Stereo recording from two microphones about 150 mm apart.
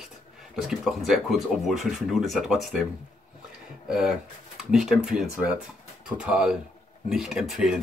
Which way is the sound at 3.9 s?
5° right (ahead or behind).